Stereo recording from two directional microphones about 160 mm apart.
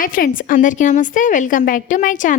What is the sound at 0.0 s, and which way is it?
A woman's voice, 60° left (ahead or behind).